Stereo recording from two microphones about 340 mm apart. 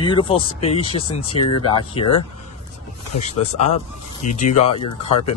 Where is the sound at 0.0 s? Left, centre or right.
Centre.